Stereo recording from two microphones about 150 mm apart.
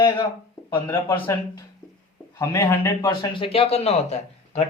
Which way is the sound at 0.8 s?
15° left (ahead or behind).